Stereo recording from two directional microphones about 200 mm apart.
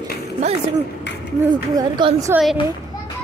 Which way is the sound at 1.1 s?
60° left (ahead or behind).